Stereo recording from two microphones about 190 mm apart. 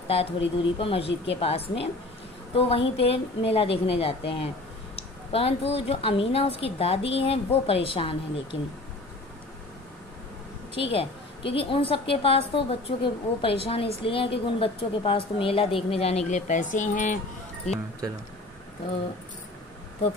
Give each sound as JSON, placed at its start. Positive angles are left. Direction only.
{"t": 0.7, "sound": "speech", "side_deg": 30}
{"t": 1.0, "sound": "speech", "side_deg": 70}
{"t": 1.4, "sound": "a woman's voice", "side_deg": 30}
{"t": 10.7, "sound": "a woman's voice", "side_deg": 30}